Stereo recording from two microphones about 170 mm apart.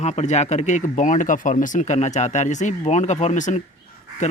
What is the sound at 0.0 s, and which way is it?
Speech, 45° left (ahead or behind).